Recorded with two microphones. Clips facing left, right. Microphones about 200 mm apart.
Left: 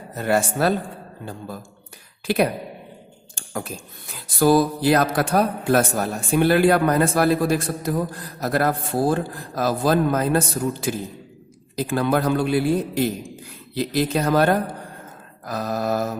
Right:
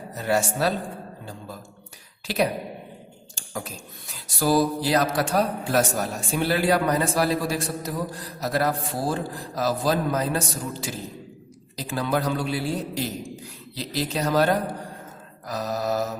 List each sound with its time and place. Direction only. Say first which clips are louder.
0.2 s a man's voice: left 3 dB; 55° left (ahead or behind)
3.5 s speech: left 4 dB; 55° left (ahead or behind)
15.4 s a sound: left 3 dB; 55° left (ahead or behind)